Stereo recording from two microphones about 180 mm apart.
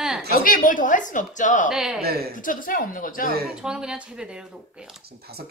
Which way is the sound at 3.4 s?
5° right (ahead or behind).